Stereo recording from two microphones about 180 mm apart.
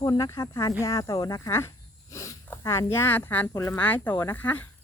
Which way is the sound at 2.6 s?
15° left (ahead or behind).